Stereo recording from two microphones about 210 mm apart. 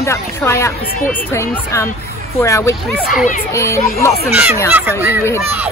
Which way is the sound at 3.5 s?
15° left (ahead or behind).